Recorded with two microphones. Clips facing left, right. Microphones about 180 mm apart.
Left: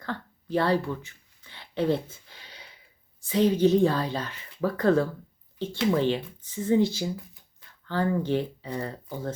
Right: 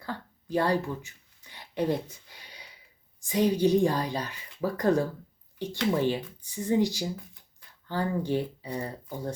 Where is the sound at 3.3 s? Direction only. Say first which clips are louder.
Left 2 dB; 15° right (ahead or behind).